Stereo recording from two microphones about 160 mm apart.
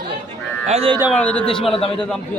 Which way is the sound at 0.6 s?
40° right (ahead or behind).